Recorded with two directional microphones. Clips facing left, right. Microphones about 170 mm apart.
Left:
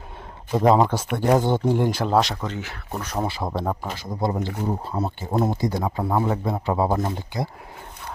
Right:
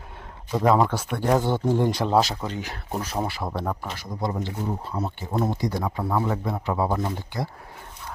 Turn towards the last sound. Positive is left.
turn(degrees=15)  # may be behind; listen again after turning